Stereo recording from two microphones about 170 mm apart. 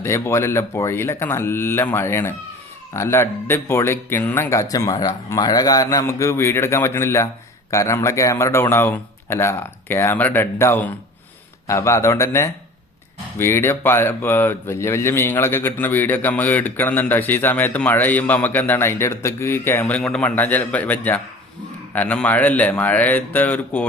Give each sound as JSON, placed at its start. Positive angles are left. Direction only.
{"t": 0.0, "sound": "speech", "side_deg": 15}